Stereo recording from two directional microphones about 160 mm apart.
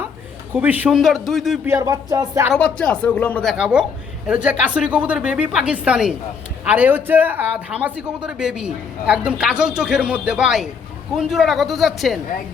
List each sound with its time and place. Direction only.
0.5 s a man's voice: 10° right (ahead or behind)
1.6 s speech: 20° right (ahead or behind)
2.5 s speech: 10° left (ahead or behind)
3.6 s a man's voice: 5° right (ahead or behind)